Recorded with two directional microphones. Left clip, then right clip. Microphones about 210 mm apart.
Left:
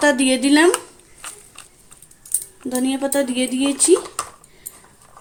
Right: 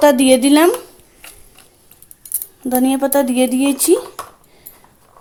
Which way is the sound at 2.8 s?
35° right (ahead or behind).